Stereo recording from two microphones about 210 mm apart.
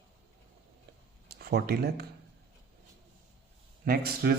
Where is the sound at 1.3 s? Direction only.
50° right (ahead or behind).